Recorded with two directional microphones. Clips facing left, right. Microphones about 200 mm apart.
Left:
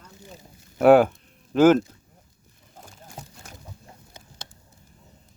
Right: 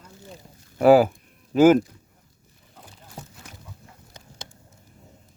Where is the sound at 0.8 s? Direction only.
Centre (ahead or behind).